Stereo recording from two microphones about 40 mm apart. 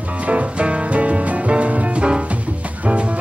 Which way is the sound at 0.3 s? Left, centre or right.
Right.